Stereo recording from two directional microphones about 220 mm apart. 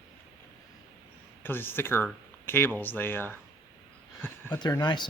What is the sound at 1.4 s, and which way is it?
Speech, 10° left (ahead or behind).